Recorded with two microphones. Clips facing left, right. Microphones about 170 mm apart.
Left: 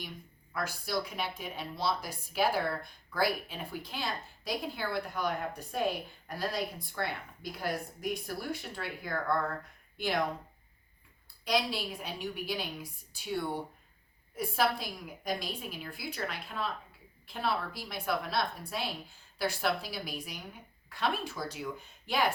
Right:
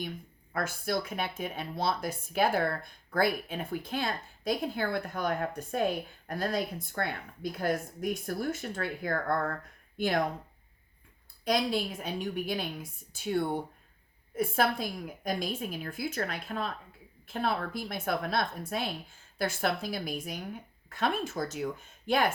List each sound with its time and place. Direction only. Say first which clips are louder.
0.9 s speech: right 2 dB; 50° right (ahead or behind)
11.4 s speech: right 3 dB; 50° right (ahead or behind)